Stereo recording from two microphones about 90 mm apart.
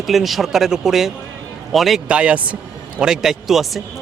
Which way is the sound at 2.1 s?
15° right (ahead or behind).